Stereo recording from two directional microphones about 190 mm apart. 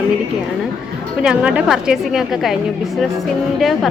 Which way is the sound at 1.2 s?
5° right (ahead or behind).